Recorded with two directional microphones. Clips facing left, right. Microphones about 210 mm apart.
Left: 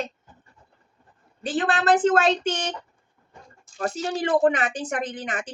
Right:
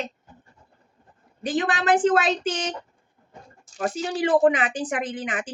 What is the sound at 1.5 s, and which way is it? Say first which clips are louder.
Speech: left 1 dB; 15° right (ahead or behind).